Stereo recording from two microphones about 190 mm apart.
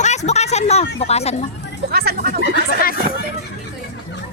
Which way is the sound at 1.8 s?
55° right (ahead or behind).